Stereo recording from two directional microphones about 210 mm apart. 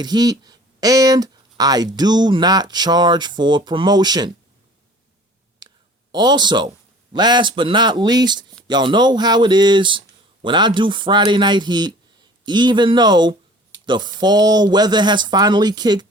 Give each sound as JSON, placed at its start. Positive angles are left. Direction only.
{"t": 0.0, "sound": "speech", "side_deg": -20}
{"t": 5.5, "sound": "speech", "side_deg": -20}